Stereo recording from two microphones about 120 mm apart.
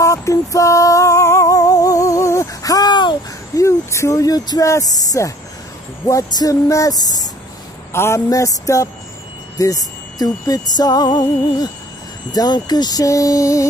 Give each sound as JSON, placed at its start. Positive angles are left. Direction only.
{"t": 0.0, "sound": "music", "side_deg": 25}
{"t": 3.6, "sound": "speech", "side_deg": 25}